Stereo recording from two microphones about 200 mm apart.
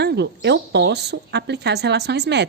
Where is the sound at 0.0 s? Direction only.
55° right (ahead or behind).